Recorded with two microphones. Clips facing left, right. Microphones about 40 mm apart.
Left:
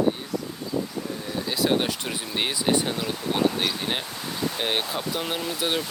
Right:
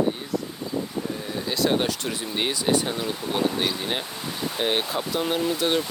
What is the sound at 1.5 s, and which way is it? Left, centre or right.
Speech, centre.